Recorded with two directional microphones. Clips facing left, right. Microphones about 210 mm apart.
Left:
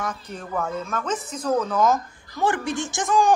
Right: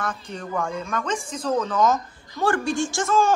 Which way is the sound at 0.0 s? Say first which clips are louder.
Right 1 dB; 10° left (ahead or behind).